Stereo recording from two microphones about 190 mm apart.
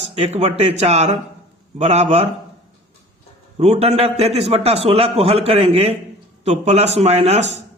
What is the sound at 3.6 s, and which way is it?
A man's voice, 30° right (ahead or behind).